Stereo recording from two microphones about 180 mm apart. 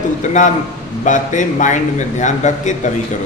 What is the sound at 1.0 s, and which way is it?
A man's voice, 45° left (ahead or behind).